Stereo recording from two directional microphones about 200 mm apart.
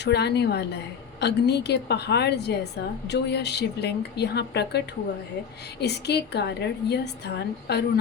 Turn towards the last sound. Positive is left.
turn(degrees=55)  # may be behind; listen again after turning